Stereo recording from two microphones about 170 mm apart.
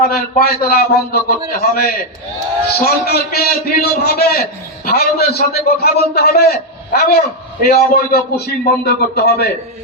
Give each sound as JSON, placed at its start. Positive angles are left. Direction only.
{"t": 0.0, "sound": "a man's voice", "side_deg": 65}